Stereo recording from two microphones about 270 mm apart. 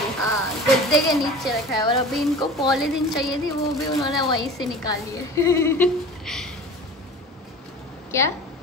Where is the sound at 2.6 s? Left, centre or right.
Centre.